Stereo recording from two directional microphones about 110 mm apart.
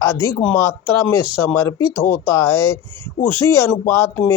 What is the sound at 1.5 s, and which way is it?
Speech, 25° left (ahead or behind).